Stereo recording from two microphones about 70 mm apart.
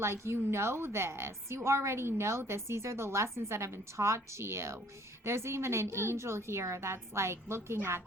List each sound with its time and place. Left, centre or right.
0.0 s a woman's voice: right